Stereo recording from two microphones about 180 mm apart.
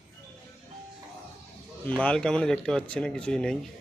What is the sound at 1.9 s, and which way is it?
A man's voice, 5° left (ahead or behind).